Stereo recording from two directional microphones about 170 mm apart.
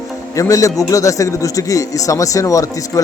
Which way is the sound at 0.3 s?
20° left (ahead or behind).